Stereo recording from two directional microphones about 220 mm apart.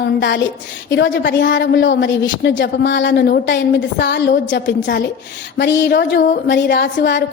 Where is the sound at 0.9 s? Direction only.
55° left (ahead or behind).